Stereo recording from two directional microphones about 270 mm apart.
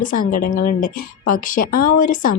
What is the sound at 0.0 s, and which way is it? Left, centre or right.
Speech, left.